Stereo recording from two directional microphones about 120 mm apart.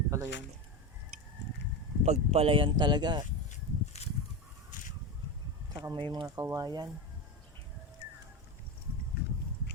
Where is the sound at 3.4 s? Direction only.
65° left (ahead or behind).